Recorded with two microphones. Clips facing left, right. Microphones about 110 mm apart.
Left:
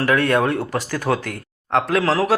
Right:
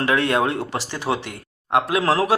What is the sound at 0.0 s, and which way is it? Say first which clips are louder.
Speech: left 2 dB; 25° right (ahead or behind).